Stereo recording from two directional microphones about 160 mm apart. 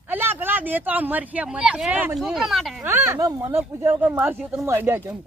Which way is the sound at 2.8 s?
15° right (ahead or behind).